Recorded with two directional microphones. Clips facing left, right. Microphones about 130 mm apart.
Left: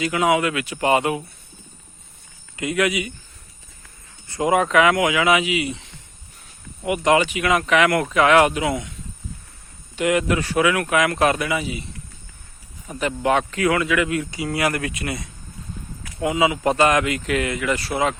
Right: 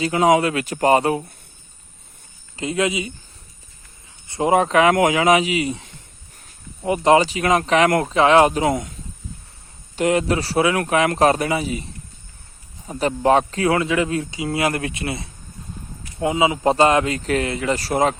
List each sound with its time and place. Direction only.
0.0 s speech: 35° right (ahead or behind)
2.6 s speech: 25° right (ahead or behind)
4.3 s speech: 30° right (ahead or behind)
12.9 s speech: 35° right (ahead or behind)